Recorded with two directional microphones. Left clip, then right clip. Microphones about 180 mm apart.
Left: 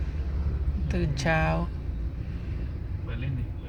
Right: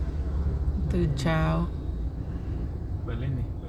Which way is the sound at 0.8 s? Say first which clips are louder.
Left 1 dB; 5° right (ahead or behind).